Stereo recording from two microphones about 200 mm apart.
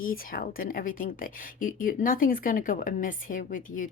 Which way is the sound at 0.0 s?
45° left (ahead or behind).